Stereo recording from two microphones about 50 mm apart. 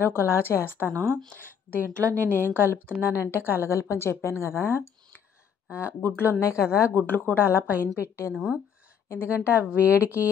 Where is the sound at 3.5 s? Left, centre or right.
Left.